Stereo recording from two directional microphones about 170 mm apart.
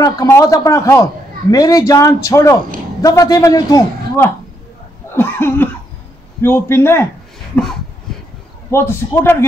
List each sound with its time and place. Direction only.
0.0 s a man's voice: 20° left (ahead or behind)